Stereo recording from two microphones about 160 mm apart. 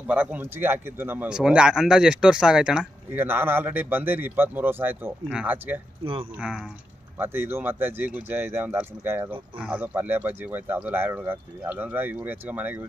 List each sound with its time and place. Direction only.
0.0 s speech: 10° right (ahead or behind)
6.0 s speech: 35° right (ahead or behind)
6.3 s speech: 5° right (ahead or behind)
7.2 s speech: 15° right (ahead or behind)